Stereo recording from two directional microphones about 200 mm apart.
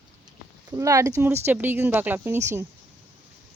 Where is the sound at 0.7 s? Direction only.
15° right (ahead or behind).